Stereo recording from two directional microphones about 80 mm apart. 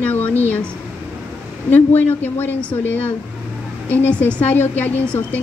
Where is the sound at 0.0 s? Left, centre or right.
Left.